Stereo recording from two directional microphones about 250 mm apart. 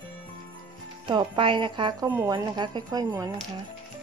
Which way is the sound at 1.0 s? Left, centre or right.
Centre.